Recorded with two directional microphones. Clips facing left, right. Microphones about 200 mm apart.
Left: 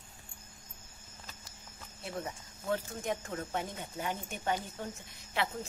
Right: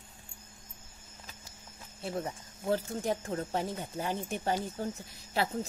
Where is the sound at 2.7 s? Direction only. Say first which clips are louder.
Right 3 dB; 35° right (ahead or behind).